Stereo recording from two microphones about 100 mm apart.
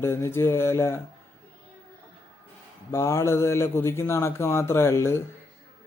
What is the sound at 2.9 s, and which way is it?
Speech, 30° left (ahead or behind).